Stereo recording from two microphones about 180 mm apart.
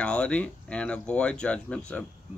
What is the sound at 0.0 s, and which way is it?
Speech, 5° left (ahead or behind).